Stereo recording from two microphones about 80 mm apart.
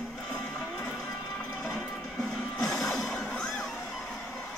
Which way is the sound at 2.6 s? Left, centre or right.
Centre.